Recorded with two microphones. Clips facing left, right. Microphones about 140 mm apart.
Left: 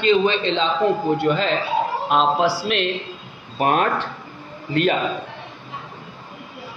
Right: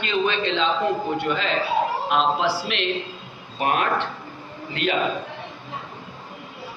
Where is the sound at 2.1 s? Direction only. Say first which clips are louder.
Left 4 dB; 40° left (ahead or behind).